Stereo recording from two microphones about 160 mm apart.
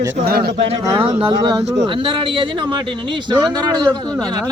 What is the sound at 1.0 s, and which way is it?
Speech, 35° right (ahead or behind).